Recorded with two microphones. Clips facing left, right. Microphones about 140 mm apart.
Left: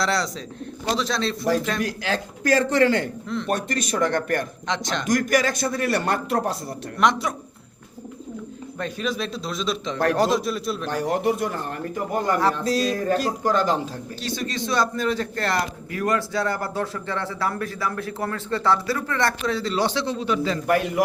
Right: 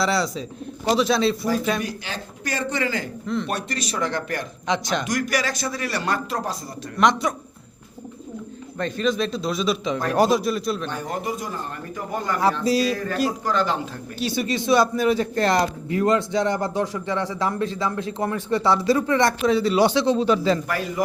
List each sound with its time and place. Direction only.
0.0 s a man's voice: 5° right (ahead or behind)
2.5 s a man's voice: 90° left; by 3.1 s 70° left (ahead or behind)
3.2 s a man's voice: centre (ahead or behind)
3.5 s a man's voice: 50° left (ahead or behind)
4.7 s a man's voice: 5° right (ahead or behind)
5.0 s a man's voice: 45° left (ahead or behind)
7.0 s a man's voice: centre (ahead or behind)
8.8 s a man's voice: 5° left (ahead or behind)
10.9 s a man's voice: 75° left (ahead or behind)
12.4 s a man's voice: 10° right (ahead or behind)
12.9 s a man's voice: 40° left (ahead or behind)
14.2 s a man's voice: 10° right (ahead or behind)
20.1 s a man's voice: 35° right (ahead or behind)
20.7 s a man's voice: 60° left (ahead or behind)